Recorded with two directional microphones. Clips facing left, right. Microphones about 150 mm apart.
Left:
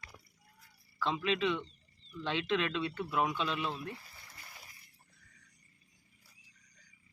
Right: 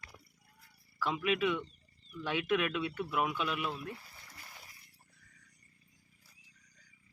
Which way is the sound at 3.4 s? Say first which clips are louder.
Even; 25° left (ahead or behind).